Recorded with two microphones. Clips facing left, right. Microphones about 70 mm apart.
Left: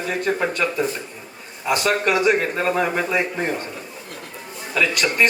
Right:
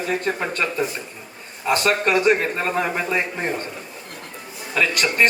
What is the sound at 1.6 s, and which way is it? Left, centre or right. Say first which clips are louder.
Speech: even; right.